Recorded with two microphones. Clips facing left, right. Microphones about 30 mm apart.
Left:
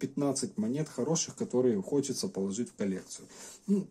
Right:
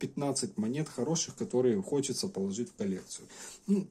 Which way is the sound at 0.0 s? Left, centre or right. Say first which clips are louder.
Left 2 dB; right.